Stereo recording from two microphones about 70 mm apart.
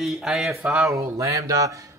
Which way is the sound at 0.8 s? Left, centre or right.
Right.